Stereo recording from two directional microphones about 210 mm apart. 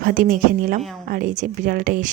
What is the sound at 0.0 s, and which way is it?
Speech, 40° right (ahead or behind).